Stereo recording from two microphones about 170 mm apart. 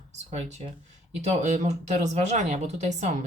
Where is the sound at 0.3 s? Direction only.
40° right (ahead or behind).